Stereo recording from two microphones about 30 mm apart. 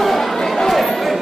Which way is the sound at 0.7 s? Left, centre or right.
Centre.